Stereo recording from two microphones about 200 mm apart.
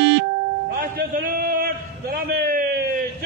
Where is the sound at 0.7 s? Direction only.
45° right (ahead or behind).